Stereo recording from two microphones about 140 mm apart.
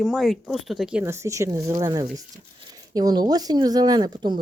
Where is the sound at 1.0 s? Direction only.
20° right (ahead or behind).